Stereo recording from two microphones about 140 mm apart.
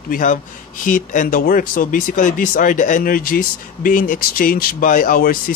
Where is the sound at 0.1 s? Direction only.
70° left (ahead or behind).